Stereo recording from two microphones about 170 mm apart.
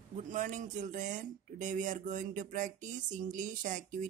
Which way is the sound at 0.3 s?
45° right (ahead or behind).